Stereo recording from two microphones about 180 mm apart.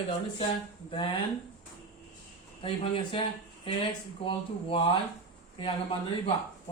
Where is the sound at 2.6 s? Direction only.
30° left (ahead or behind).